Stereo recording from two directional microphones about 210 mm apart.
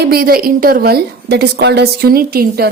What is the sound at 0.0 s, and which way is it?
A woman's voice, 45° right (ahead or behind).